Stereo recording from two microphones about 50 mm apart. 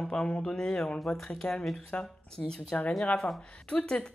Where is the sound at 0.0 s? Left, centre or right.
Centre.